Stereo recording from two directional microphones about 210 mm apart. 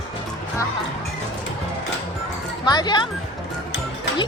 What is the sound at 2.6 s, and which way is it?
Speech, 20° left (ahead or behind).